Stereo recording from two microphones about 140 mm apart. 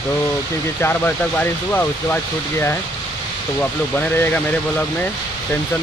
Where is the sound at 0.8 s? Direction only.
10° left (ahead or behind).